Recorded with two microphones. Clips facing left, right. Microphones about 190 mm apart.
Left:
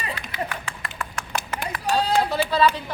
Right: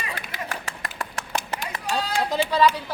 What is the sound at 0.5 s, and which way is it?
Clapping, 40° right (ahead or behind).